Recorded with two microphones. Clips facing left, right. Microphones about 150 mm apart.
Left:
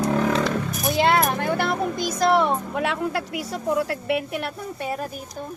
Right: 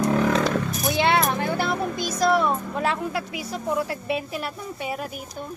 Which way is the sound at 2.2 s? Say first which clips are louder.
Left 1 dB; 60° left (ahead or behind).